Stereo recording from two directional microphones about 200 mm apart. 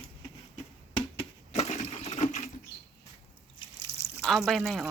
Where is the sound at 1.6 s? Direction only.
35° left (ahead or behind).